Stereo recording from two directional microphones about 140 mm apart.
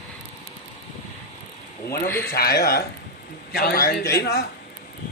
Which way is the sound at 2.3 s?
90° left.